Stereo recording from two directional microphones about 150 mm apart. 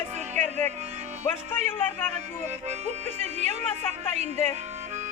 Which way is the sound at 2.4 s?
50° right (ahead or behind).